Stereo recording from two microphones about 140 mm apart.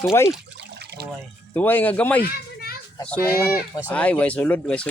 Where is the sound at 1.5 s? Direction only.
15° left (ahead or behind).